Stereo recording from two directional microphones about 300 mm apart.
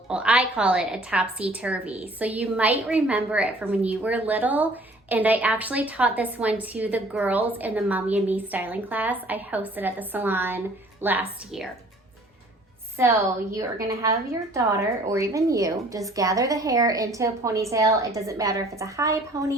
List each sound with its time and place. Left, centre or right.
0.1 s a woman's voice: centre
13.0 s a woman's voice: centre